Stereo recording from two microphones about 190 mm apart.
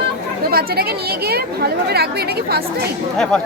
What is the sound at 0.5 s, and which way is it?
Speech, 55° right (ahead or behind).